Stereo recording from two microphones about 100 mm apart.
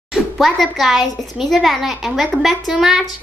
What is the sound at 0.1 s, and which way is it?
A child's voice, centre (ahead or behind).